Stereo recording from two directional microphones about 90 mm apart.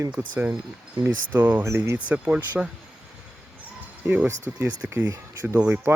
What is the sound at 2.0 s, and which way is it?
Speech, 15° right (ahead or behind).